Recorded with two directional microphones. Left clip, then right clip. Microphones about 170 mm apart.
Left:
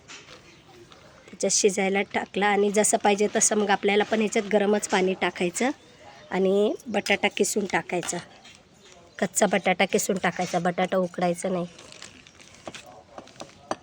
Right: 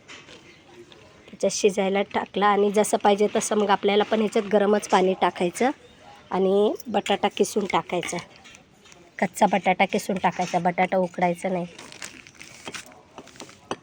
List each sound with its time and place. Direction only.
1.4 s a woman's voice: 5° left (ahead or behind)
9.1 s speech: 10° left (ahead or behind)
11.9 s a sound: 45° right (ahead or behind)